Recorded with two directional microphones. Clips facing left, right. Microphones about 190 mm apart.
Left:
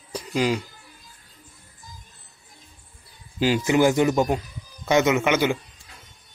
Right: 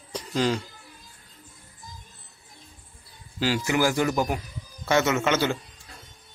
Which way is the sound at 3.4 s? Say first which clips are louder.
Left 5 dB; 20° left (ahead or behind).